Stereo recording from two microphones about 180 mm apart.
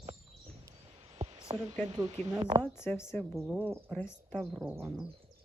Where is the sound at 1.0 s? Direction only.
35° right (ahead or behind).